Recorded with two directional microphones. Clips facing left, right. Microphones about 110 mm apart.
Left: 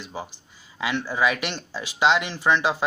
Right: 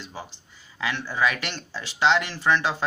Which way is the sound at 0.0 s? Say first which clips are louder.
Left 3 dB; 15° left (ahead or behind).